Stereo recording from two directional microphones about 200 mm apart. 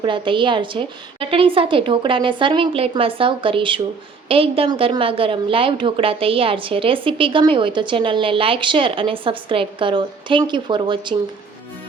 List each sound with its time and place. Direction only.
0.0 s a woman's voice: 25° right (ahead or behind)